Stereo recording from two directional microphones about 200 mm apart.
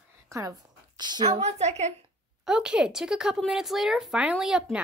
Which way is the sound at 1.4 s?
35° right (ahead or behind).